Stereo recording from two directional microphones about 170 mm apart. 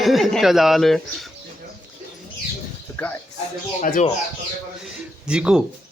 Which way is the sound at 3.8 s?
50° left (ahead or behind).